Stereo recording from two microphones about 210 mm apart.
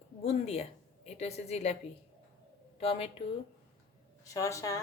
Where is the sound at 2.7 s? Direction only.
30° left (ahead or behind).